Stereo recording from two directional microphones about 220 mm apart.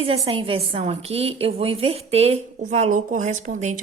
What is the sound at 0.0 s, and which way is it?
A woman's voice, 25° right (ahead or behind).